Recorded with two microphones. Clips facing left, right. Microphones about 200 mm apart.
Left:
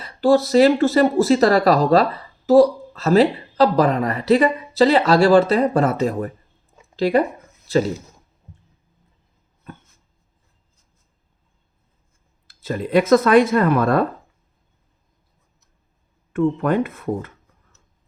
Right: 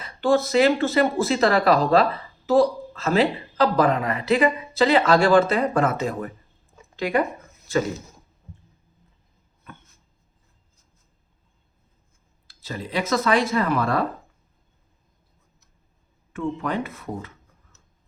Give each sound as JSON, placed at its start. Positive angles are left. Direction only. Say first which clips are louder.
{"t": 0.0, "sound": "speech", "louder": "left 4 dB", "side_deg": 40}
{"t": 12.5, "sound": "speech", "louder": "left 9 dB", "side_deg": 55}
{"t": 16.6, "sound": "speech", "louder": "left 7 dB", "side_deg": 55}